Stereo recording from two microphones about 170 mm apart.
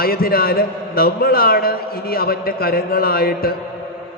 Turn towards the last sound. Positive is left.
turn(degrees=60)  # may be behind; listen again after turning